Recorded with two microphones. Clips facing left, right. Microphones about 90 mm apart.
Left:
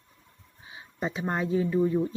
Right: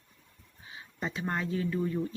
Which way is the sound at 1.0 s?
20° left (ahead or behind).